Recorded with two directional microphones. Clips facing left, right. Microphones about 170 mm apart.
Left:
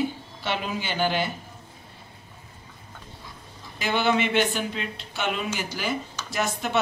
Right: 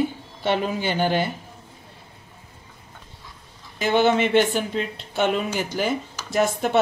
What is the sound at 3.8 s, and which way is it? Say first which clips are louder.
Speech: right 5 dB; 45° right (ahead or behind).